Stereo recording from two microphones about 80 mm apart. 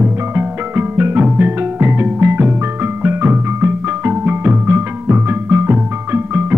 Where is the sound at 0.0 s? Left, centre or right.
Right.